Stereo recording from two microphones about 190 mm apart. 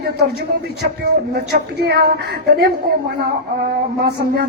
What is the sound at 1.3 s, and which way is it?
A woman's voice, 60° right (ahead or behind).